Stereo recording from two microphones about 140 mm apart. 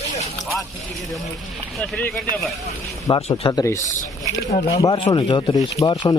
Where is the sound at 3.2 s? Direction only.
45° left (ahead or behind).